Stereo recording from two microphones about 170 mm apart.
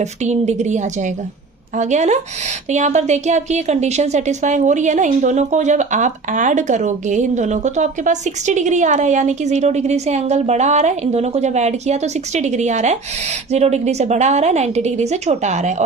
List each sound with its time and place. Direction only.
0.0 s a woman's voice: 45° right (ahead or behind)